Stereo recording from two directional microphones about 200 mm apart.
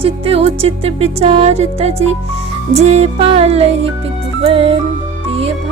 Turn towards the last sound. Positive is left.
turn(degrees=-30)  # may be behind; listen again after turning